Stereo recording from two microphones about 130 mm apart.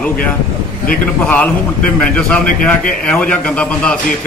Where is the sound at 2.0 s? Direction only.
10° left (ahead or behind).